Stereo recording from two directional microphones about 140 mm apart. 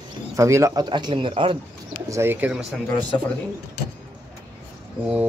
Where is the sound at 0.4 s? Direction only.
20° right (ahead or behind); by 1.6 s 40° right (ahead or behind).